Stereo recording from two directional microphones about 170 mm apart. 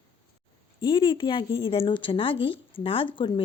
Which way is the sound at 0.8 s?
30° left (ahead or behind).